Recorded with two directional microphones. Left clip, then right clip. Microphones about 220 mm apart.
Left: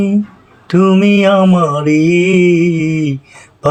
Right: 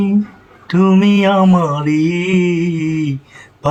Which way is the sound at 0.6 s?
15° left (ahead or behind).